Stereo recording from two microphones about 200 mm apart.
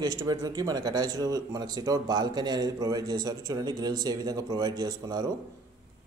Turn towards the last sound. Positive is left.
turn(degrees=-20)  # may be behind; listen again after turning